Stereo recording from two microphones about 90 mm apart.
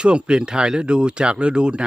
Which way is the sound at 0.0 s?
10° right (ahead or behind).